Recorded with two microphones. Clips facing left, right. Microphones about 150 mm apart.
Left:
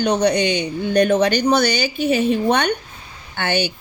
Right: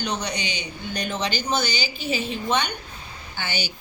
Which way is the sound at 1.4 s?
65° left (ahead or behind).